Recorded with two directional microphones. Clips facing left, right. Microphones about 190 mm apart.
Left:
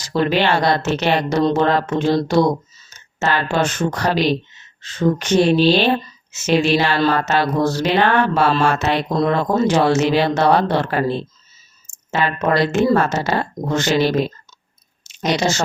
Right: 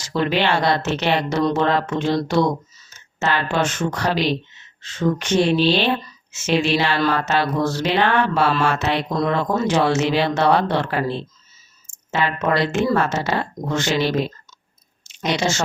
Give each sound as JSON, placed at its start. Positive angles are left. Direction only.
{"t": 0.0, "sound": "speech", "side_deg": 40}
{"t": 7.1, "sound": "mantra", "side_deg": 40}
{"t": 9.2, "sound": "speech", "side_deg": 40}